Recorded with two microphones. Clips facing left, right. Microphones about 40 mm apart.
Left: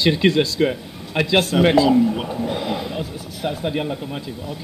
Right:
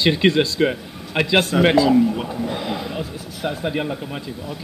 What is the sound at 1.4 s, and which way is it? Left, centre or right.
Speech, right.